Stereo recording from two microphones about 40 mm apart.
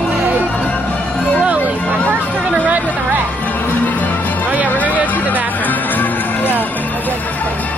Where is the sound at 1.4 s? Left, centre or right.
Right.